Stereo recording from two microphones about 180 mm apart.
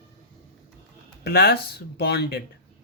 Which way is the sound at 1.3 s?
60° left (ahead or behind).